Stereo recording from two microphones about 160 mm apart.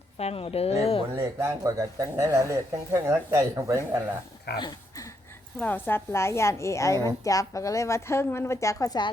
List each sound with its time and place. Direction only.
0.2 s speech: 40° left (ahead or behind)
1.1 s speech: 15° right (ahead or behind)
4.5 s a sound: 25° left (ahead or behind)
5.5 s a woman's voice: 10° left (ahead or behind)